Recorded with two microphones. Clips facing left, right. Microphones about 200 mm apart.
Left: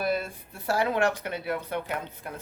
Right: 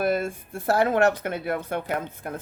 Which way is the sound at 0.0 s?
50° right (ahead or behind).